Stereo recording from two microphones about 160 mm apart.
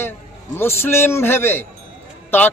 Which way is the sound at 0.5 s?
15° left (ahead or behind).